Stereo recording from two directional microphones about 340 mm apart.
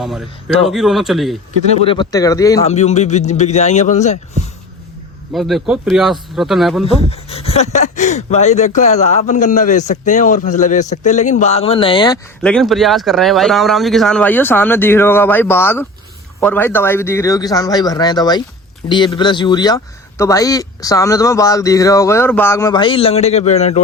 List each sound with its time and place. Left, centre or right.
0.0 s a man's voice: centre
1.7 s speech: centre
5.3 s a man's voice: centre
7.1 s speech: centre